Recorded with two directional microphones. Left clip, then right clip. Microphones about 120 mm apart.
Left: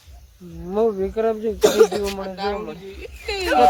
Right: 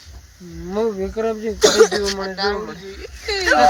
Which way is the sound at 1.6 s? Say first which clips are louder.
Right 2 dB; 20° left (ahead or behind).